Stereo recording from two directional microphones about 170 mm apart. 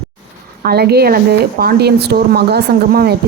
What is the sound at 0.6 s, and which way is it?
A woman's voice, 70° right (ahead or behind).